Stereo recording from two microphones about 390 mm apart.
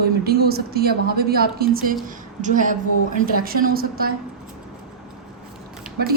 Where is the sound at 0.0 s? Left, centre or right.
Right.